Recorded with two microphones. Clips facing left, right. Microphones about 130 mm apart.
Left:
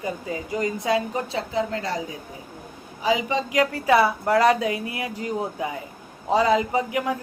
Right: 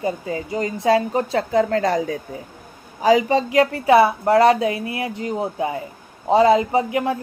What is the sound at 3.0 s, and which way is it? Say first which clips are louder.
Speech: right 7 dB; 45° right (ahead or behind).